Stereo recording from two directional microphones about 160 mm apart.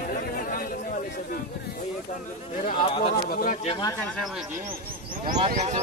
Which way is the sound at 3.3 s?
60° left (ahead or behind).